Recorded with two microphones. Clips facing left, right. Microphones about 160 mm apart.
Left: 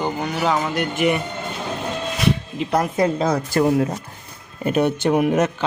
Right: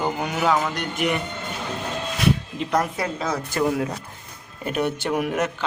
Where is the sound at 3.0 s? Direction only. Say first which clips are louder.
Left 7 dB; 30° left (ahead or behind).